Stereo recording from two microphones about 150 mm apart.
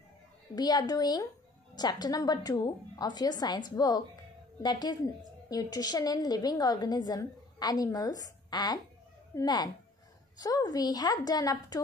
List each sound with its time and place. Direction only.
0.6 s a woman's voice: 25° left (ahead or behind)